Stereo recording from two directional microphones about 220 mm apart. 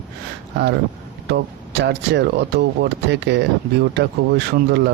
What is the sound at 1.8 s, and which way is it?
Speech, 50° right (ahead or behind).